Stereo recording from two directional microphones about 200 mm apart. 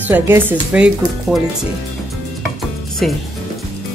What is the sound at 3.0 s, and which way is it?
Speech, centre (ahead or behind).